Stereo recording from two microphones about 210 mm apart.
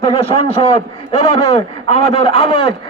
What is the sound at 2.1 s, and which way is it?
Speech, 25° left (ahead or behind).